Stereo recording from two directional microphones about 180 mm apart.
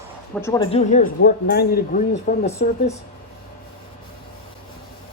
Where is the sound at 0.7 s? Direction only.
40° left (ahead or behind).